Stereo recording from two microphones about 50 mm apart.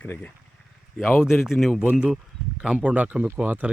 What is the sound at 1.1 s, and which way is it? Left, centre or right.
Speech, left.